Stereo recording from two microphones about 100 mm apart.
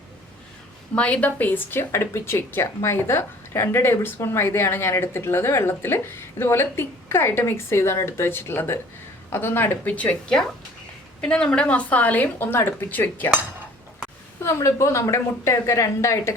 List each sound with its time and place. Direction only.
0.9 s a woman's voice: 10° left (ahead or behind)
14.4 s speech: 30° left (ahead or behind)